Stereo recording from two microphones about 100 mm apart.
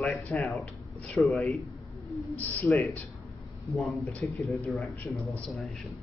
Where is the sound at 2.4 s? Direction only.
15° left (ahead or behind).